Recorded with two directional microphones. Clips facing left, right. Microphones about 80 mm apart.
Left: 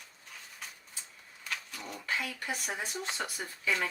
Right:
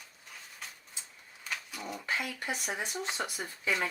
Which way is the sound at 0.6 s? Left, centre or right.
Centre.